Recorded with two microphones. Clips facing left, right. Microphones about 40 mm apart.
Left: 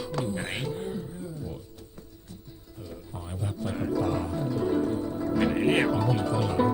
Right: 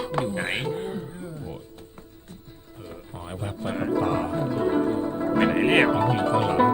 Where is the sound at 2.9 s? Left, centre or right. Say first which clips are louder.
Right 3 dB; right.